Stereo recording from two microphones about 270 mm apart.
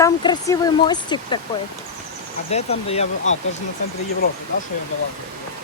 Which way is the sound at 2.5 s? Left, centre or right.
Left.